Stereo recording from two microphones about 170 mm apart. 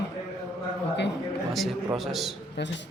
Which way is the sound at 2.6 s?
80° left.